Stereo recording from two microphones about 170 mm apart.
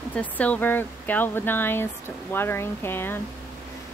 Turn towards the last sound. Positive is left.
turn(degrees=15)  # may be behind; listen again after turning